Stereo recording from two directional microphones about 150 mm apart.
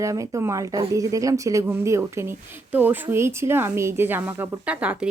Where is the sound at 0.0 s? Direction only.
20° right (ahead or behind).